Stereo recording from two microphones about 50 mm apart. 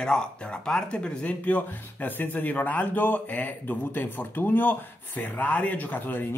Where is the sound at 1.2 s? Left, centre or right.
Left.